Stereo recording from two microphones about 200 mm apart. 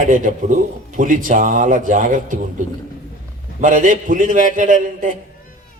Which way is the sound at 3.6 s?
40° right (ahead or behind).